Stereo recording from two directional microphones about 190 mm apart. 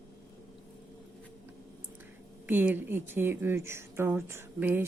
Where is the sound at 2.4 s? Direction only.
10° right (ahead or behind).